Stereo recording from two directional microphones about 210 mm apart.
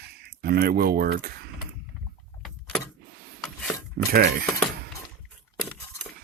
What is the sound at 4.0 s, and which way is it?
Speech, 45° right (ahead or behind).